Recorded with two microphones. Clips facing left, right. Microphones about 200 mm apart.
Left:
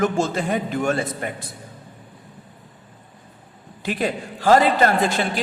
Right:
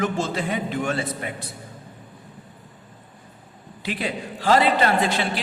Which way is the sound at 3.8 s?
45° left (ahead or behind).